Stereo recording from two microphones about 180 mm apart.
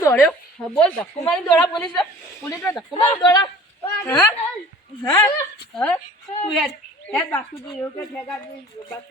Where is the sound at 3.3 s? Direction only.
25° left (ahead or behind).